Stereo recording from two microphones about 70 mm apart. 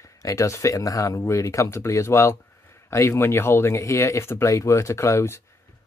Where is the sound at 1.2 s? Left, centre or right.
Left.